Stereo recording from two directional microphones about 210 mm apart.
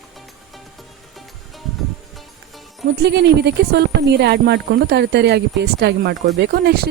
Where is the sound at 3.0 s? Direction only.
55° right (ahead or behind).